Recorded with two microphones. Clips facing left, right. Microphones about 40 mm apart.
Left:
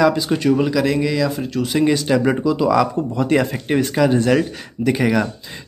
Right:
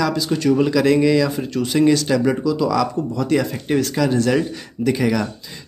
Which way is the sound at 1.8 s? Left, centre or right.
Centre.